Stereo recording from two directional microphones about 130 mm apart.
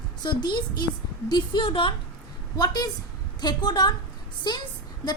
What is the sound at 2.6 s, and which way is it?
A woman's voice, 30° left (ahead or behind).